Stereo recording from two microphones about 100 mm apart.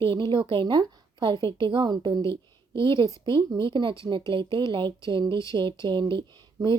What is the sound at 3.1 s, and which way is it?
Speech, 35° left (ahead or behind).